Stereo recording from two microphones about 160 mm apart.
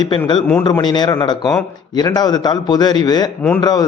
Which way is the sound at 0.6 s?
25° left (ahead or behind).